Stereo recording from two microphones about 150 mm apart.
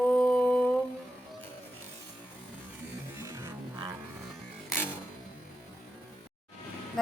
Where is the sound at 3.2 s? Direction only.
20° right (ahead or behind).